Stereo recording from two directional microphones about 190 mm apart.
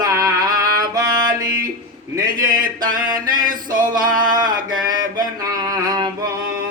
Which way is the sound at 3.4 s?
45° right (ahead or behind).